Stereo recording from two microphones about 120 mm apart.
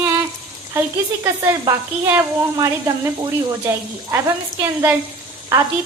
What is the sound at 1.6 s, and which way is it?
Speech, 25° right (ahead or behind).